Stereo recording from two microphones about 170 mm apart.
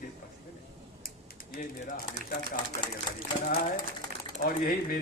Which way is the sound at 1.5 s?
55° left (ahead or behind).